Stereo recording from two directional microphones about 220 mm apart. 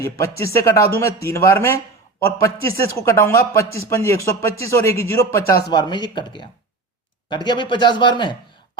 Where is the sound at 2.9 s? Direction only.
10° left (ahead or behind).